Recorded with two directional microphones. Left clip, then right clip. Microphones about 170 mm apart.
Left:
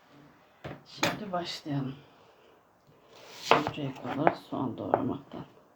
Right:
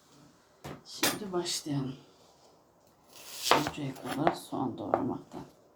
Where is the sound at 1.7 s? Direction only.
35° left (ahead or behind).